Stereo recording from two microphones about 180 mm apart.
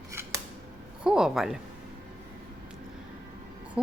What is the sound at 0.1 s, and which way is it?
Scissors, 15° right (ahead or behind).